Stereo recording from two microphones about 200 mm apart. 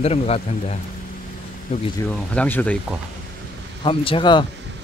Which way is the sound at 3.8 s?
25° left (ahead or behind).